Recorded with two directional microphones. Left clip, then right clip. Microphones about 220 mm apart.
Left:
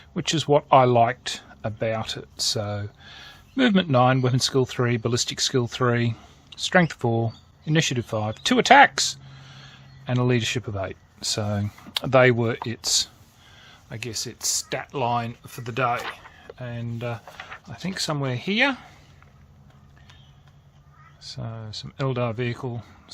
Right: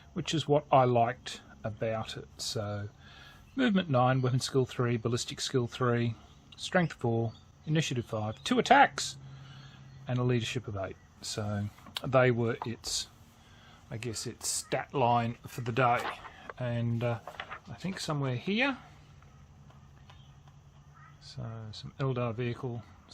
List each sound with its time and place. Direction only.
0.1 s speech: 30° left (ahead or behind)
13.6 s speech: 15° left (ahead or behind); by 17.1 s 10° right (ahead or behind)
17.1 s speech: centre (ahead or behind)
17.8 s speech: 25° left (ahead or behind)
21.2 s speech: 30° left (ahead or behind)